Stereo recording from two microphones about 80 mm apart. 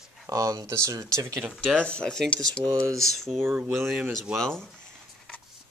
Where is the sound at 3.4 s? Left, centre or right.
Right.